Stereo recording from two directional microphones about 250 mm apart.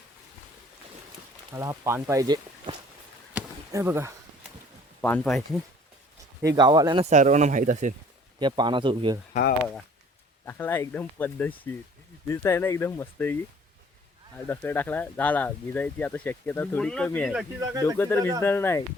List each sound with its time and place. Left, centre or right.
1.5 s speech: centre
3.3 s a sound: centre
4.9 s speech: centre
6.6 s speech: centre
8.4 s speech: centre
10.4 s speech: centre
14.4 s speech: centre